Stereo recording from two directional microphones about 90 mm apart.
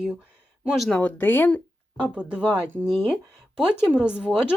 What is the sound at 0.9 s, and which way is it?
Speech, 15° left (ahead or behind).